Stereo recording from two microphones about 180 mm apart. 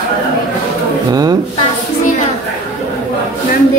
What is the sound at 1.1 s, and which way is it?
Speech, 20° right (ahead or behind).